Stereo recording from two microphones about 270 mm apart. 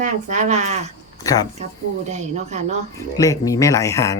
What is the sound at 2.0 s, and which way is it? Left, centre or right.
Speech, right.